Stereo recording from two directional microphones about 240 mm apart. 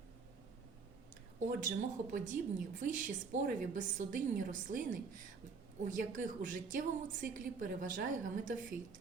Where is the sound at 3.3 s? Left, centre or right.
Right.